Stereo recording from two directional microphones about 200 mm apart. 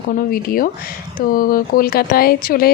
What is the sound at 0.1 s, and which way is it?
Speech, 45° left (ahead or behind).